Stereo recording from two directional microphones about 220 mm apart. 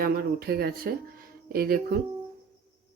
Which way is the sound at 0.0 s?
45° right (ahead or behind).